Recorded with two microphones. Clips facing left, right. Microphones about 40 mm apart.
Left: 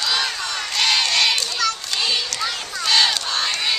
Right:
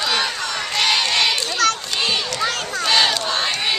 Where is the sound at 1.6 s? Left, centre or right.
Right.